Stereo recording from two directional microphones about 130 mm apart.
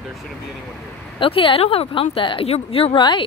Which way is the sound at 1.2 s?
40° left (ahead or behind).